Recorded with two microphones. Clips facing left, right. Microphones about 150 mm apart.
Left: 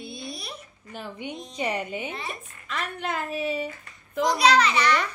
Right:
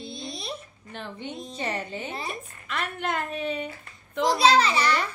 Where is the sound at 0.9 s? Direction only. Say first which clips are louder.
Left 1 dB; 10° left (ahead or behind).